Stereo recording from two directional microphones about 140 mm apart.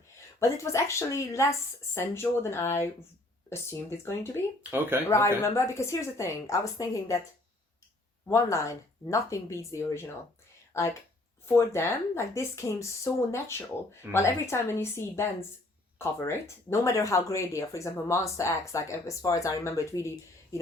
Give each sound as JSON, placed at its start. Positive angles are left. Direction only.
{"t": 0.3, "sound": "speech", "side_deg": 20}
{"t": 4.7, "sound": "speech", "side_deg": -15}
{"t": 5.0, "sound": "speech", "side_deg": 20}
{"t": 8.3, "sound": "speech", "side_deg": 20}